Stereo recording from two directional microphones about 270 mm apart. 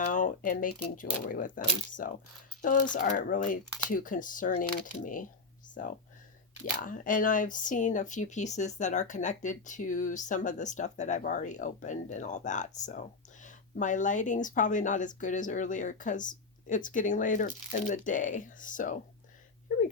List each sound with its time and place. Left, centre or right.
0.1 s speech: left
6.7 s speech: left